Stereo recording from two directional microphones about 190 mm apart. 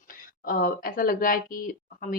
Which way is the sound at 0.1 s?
50° left (ahead or behind).